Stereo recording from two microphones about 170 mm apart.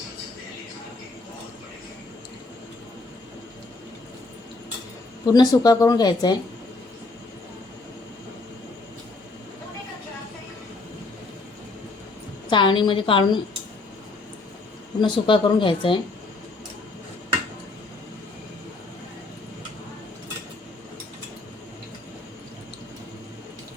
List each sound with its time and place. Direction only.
5.2 s speech: 20° left (ahead or behind)
12.5 s speech: 30° left (ahead or behind)
15.0 s speech: 25° left (ahead or behind)